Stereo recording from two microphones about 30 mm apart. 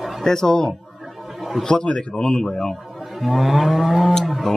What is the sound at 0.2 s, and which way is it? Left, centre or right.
Speech, centre.